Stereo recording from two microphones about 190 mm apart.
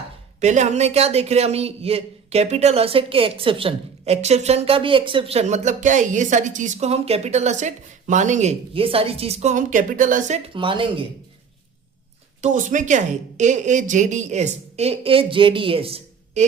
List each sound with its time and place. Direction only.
0.3 s a man's voice: 40° right (ahead or behind)
10.5 s speech: 25° right (ahead or behind)
12.4 s a man's voice: 40° right (ahead or behind)